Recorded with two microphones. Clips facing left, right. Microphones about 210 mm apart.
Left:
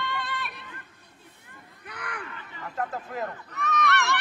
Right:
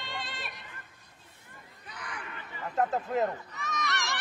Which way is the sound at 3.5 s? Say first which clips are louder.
Left 8 dB; 60° left (ahead or behind).